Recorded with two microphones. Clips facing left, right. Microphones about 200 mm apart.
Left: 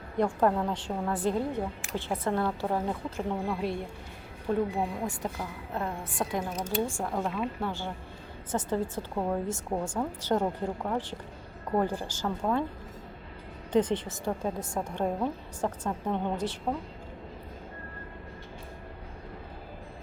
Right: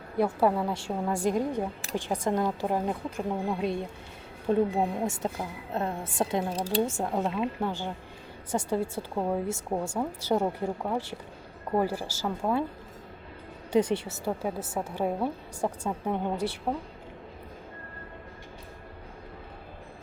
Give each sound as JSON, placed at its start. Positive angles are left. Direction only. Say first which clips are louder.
{"t": 0.2, "sound": "a woman's voice", "louder": "right 1 dB", "side_deg": -10}
{"t": 6.8, "sound": "a woman's voice", "louder": "right 2 dB", "side_deg": -20}
{"t": 13.7, "sound": "a woman's voice", "louder": "right 1 dB", "side_deg": -10}